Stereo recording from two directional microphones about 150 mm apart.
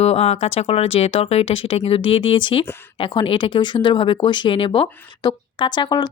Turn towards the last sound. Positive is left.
turn(degrees=30)  # may be behind; listen again after turning